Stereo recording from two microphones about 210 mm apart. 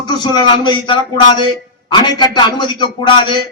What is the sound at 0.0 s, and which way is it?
A man's voice, 20° left (ahead or behind).